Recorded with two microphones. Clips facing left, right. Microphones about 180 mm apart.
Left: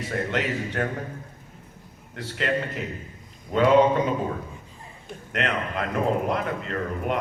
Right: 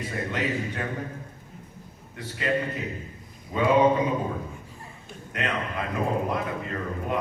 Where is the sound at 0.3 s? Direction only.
70° left (ahead or behind).